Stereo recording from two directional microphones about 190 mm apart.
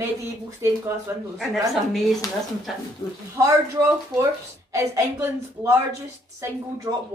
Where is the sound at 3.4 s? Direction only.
15° right (ahead or behind).